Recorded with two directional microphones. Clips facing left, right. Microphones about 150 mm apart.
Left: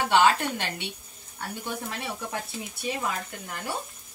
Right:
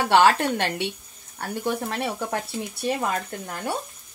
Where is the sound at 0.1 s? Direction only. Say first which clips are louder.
Right 4 dB; 60° right (ahead or behind).